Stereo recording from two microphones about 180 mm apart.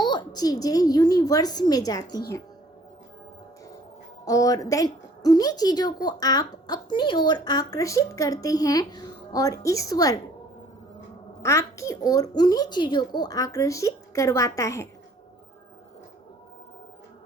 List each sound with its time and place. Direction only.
0.0 s a woman's voice: 25° left (ahead or behind)
4.3 s a woman's voice: 20° left (ahead or behind)
11.4 s a woman's voice: 15° left (ahead or behind)